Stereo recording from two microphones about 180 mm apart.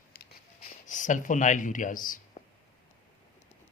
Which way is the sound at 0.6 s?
45° left (ahead or behind).